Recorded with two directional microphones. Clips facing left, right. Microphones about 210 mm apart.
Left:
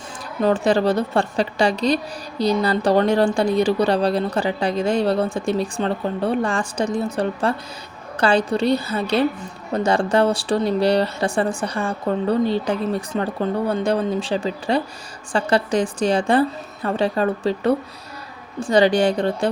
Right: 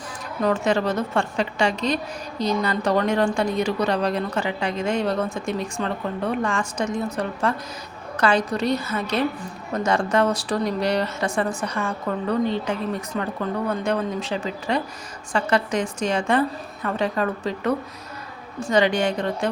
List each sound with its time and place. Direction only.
0.4 s a woman's voice: 30° left (ahead or behind)